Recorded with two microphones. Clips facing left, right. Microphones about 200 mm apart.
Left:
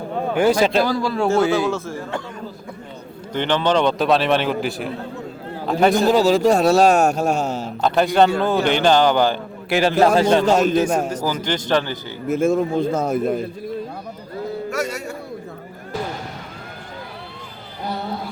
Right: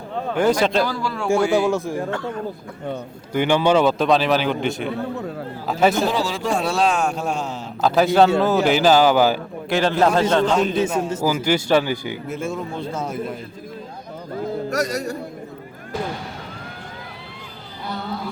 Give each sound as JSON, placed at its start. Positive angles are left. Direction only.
{"t": 0.6, "sound": "a man's voice", "side_deg": 5}
{"t": 0.9, "sound": "speech", "side_deg": 35}
{"t": 1.3, "sound": "speech", "side_deg": -15}
{"t": 3.3, "sound": "a man's voice", "side_deg": -10}
{"t": 6.1, "sound": "speech", "side_deg": 40}
{"t": 7.6, "sound": "a man's voice", "side_deg": 0}
{"t": 9.6, "sound": "a man's voice", "side_deg": 10}
{"t": 10.4, "sound": "speech", "side_deg": 40}
{"t": 11.2, "sound": "speech", "side_deg": -10}
{"t": 12.3, "sound": "speech", "side_deg": 45}
{"t": 14.7, "sound": "speech", "side_deg": -40}